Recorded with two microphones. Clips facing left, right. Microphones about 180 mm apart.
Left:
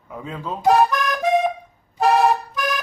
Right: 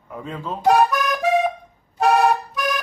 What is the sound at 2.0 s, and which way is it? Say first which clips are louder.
Toot: even; centre (ahead or behind).